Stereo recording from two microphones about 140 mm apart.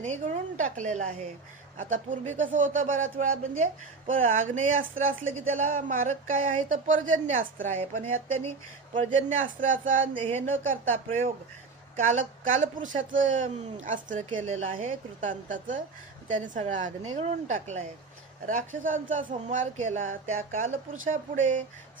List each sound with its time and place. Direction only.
0.0 s a woman's voice: 60° right (ahead or behind)
8.4 s speech: 40° right (ahead or behind)
9.3 s a man's voice: 70° right (ahead or behind)
10.2 s speech: 40° right (ahead or behind)
11.9 s a man's voice: 65° right (ahead or behind)
18.4 s a man's voice: 70° right (ahead or behind)